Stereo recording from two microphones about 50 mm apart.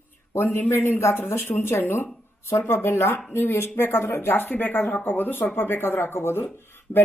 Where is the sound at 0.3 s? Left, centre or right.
Left.